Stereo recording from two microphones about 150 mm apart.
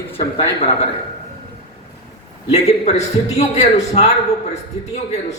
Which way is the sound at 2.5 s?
45° left (ahead or behind).